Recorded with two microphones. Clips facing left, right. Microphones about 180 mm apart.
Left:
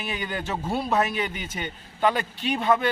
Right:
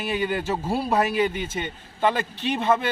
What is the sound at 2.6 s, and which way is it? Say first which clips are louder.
Speech: even; centre (ahead or behind).